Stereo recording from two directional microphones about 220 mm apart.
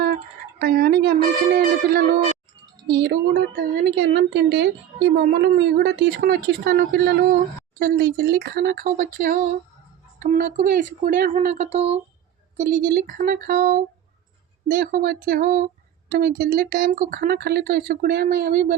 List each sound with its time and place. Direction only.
0.6 s a woman's voice: 45° right (ahead or behind)